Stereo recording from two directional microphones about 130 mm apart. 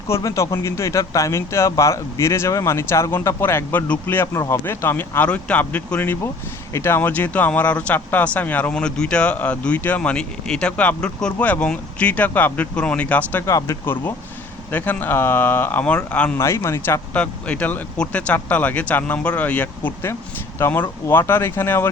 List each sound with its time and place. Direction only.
0.1 s speech: 25° left (ahead or behind)
16.4 s speech: 20° left (ahead or behind)
17.2 s speech: 10° left (ahead or behind)